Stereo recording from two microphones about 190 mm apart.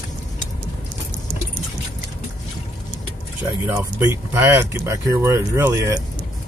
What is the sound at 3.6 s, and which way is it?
Speech, 15° right (ahead or behind).